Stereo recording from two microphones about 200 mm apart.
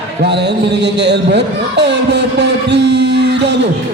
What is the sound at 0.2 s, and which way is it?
A man's voice, 60° right (ahead or behind).